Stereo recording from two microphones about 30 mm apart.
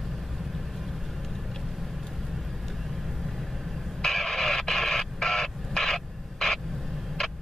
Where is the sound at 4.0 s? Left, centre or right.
Centre.